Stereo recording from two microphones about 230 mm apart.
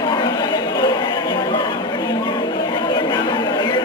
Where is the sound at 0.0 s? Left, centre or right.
Centre.